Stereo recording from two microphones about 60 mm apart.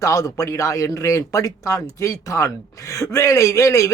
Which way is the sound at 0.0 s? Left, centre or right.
Left.